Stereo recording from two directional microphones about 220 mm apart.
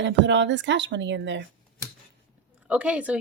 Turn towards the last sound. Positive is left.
turn(degrees=-5)  # may be behind; listen again after turning